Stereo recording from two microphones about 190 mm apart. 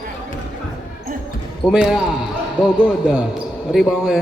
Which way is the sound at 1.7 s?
5° right (ahead or behind).